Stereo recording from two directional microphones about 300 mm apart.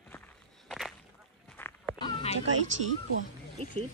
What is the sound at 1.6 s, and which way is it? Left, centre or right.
Cat, centre.